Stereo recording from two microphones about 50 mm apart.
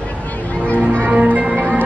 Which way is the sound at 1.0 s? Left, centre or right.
Right.